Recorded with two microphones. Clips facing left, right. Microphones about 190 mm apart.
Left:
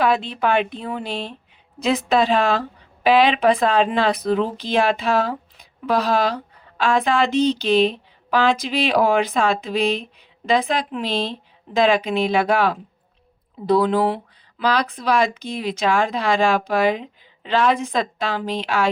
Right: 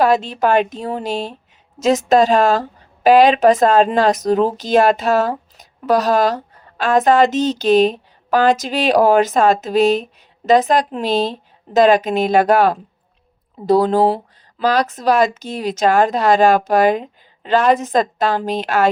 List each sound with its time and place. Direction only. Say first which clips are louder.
0.0 s a woman's voice: right 4 dB; 45° right (ahead or behind)